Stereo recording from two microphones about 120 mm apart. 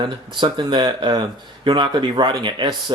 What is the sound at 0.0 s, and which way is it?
Speech, 40° right (ahead or behind).